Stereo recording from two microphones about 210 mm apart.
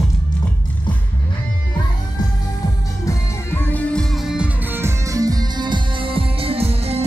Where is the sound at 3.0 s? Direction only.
10° left (ahead or behind).